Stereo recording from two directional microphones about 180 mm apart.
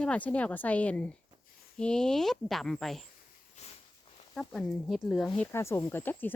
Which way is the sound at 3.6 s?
40° left (ahead or behind).